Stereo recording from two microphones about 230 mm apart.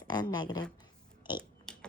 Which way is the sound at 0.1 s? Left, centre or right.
Centre.